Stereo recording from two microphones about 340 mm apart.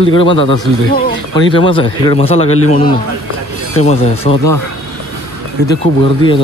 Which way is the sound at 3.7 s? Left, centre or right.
Centre.